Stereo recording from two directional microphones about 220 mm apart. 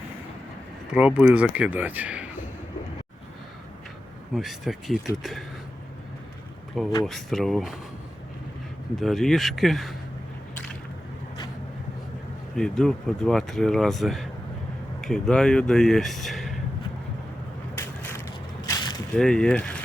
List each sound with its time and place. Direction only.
0.9 s speech: 5° right (ahead or behind)
4.4 s speech: centre (ahead or behind)
7.0 s speech: centre (ahead or behind)
9.0 s speech: centre (ahead or behind)
12.5 s speech: 5° left (ahead or behind)
17.7 s crushing: 10° left (ahead or behind)
18.6 s a sound: 15° left (ahead or behind)
19.1 s speech: 5° left (ahead or behind)